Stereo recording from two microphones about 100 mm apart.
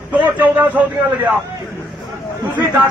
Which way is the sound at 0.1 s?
15° right (ahead or behind).